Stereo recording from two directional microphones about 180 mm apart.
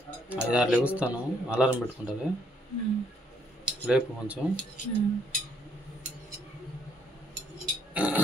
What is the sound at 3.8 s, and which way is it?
Cutlery, 5° right (ahead or behind).